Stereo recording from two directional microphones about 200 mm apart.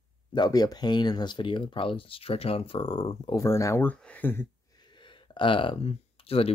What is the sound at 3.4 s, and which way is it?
Speech, 15° left (ahead or behind).